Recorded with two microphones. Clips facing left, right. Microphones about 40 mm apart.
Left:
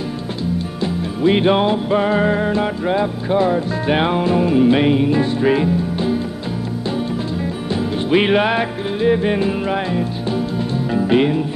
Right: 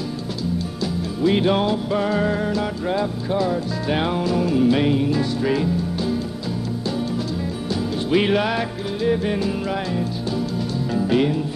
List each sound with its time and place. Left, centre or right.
1.2 s music: left
7.7 s music: left